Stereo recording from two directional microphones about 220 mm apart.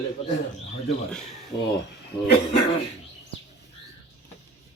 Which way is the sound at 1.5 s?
20° left (ahead or behind).